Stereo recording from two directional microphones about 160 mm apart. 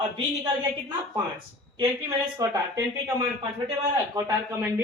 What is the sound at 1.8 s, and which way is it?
Speech, 25° right (ahead or behind).